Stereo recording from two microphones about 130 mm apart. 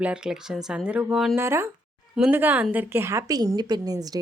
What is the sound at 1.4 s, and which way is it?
A woman's voice, 20° right (ahead or behind).